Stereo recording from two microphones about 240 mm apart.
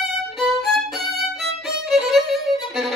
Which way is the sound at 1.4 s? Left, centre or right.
Centre.